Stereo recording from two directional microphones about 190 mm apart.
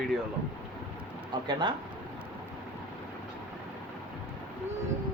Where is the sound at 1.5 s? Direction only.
25° right (ahead or behind).